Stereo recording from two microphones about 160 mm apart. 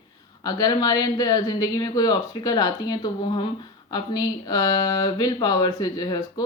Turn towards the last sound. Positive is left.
turn(degrees=25)  # may be behind; listen again after turning